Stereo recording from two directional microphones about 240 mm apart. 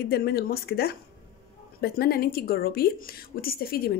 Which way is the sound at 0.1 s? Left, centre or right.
Left.